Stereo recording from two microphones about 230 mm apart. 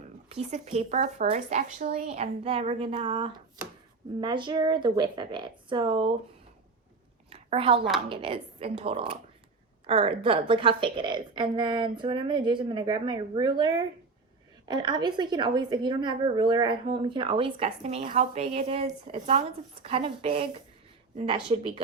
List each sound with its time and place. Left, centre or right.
0.3 s a woman's voice: right
7.3 s a sound: right
8.1 s a woman's voice: right